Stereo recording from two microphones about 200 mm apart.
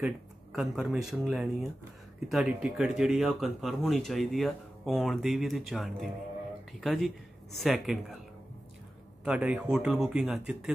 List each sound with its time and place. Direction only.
0.0 s speech: centre (ahead or behind)
9.2 s speech: 5° right (ahead or behind)